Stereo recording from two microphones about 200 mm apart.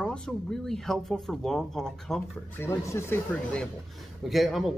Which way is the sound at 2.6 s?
15° left (ahead or behind).